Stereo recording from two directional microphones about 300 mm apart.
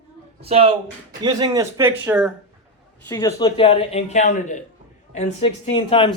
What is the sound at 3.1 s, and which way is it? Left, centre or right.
Speech, centre.